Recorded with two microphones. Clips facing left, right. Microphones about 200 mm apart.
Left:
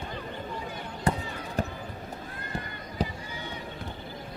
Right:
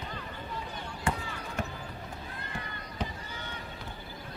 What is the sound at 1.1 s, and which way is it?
Basketball bounce, 40° left (ahead or behind).